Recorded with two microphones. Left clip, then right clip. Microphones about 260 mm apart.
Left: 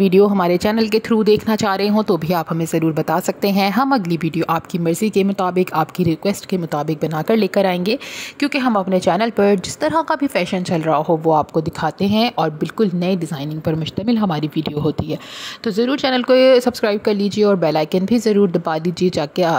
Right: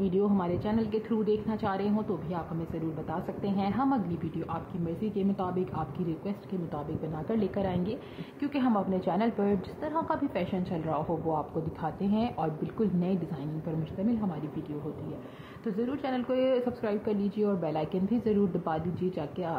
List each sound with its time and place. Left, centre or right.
0.0 s a woman's voice: left
15.6 s a woman's voice: left